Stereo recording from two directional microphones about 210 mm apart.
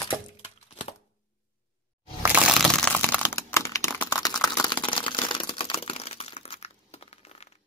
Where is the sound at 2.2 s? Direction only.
5° right (ahead or behind); by 7.5 s 30° left (ahead or behind).